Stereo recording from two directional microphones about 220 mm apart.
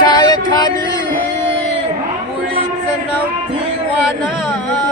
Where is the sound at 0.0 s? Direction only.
20° left (ahead or behind).